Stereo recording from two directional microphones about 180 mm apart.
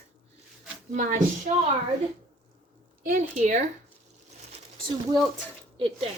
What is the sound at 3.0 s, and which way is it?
Speech, 45° right (ahead or behind).